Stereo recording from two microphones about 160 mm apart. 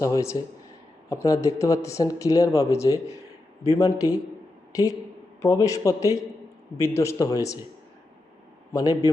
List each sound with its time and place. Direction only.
0.0 s speech: 20° left (ahead or behind)
8.7 s a man's voice: 20° left (ahead or behind)